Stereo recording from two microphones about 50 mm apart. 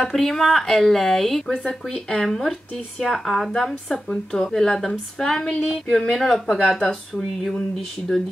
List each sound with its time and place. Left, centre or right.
0.0 s speech: centre